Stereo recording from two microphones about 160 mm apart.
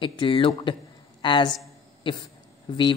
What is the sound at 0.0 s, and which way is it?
A woman's voice, 30° left (ahead or behind).